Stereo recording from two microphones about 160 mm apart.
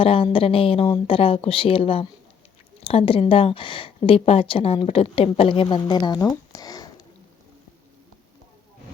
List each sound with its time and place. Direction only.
0.0 s a woman's voice: 35° left (ahead or behind)